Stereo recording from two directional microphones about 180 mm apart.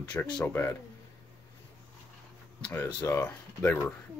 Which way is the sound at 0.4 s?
15° left (ahead or behind).